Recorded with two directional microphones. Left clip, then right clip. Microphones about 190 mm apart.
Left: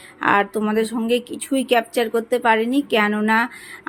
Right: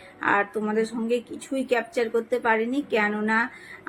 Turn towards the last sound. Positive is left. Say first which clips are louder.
# left 5 dB
turn(degrees=55)  # may be behind; listen again after turning